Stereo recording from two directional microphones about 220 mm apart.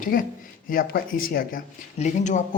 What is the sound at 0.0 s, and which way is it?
A woman's voice, 40° left (ahead or behind).